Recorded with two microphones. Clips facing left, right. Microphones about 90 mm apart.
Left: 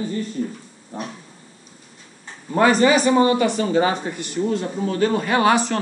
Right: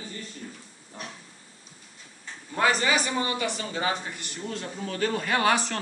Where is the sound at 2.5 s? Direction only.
45° left (ahead or behind).